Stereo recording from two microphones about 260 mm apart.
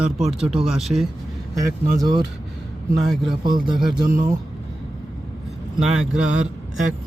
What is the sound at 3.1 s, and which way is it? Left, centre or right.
Speech, centre.